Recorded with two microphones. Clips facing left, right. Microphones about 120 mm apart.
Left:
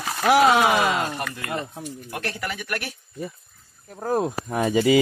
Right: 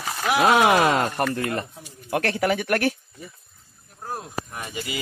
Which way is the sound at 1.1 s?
50° right (ahead or behind).